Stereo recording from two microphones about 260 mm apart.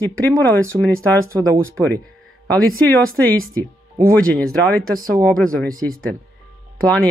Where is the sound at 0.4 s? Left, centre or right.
Centre.